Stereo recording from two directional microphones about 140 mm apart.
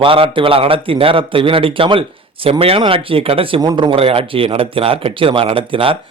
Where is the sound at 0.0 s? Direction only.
40° right (ahead or behind).